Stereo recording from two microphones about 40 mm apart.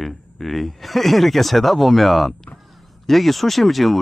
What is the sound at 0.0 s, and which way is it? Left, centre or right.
Speech, centre.